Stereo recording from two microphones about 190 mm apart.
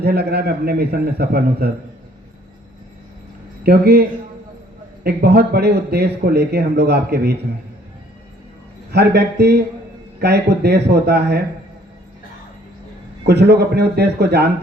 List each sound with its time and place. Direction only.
0.0 s speech: 55° right (ahead or behind)
3.6 s speech: 55° right (ahead or behind)
5.0 s speech: 60° right (ahead or behind)
8.9 s speech: 60° right (ahead or behind)
13.2 s speech: 60° right (ahead or behind)